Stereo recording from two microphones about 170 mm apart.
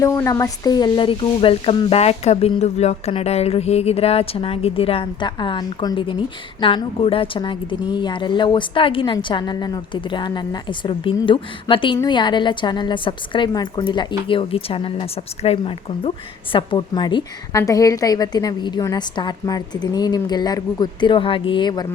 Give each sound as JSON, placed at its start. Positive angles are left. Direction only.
{"t": 0.3, "sound": "a woman's voice", "side_deg": 20}